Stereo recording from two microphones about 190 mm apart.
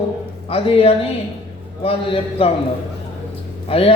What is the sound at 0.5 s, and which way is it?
Speech, 30° left (ahead or behind).